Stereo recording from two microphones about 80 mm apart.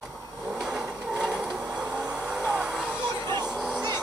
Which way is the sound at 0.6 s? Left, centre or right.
Centre.